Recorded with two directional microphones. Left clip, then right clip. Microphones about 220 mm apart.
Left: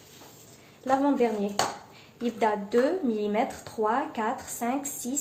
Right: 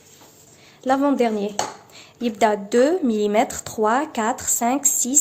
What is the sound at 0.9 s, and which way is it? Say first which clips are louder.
Speech: right 5 dB; 50° right (ahead or behind).